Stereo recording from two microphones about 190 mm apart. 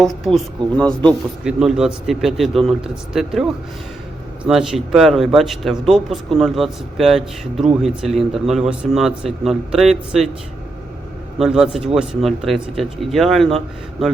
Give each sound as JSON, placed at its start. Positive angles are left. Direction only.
{"t": 0.0, "sound": "speech", "side_deg": 0}
{"t": 11.3, "sound": "speech", "side_deg": 0}